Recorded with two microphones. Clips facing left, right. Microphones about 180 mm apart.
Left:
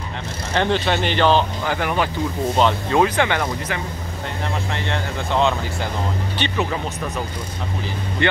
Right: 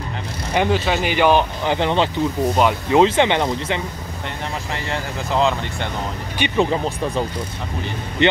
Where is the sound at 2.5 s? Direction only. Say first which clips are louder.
Left 1 dB; 10° right (ahead or behind).